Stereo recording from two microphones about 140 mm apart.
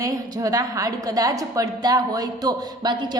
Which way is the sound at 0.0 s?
25° right (ahead or behind).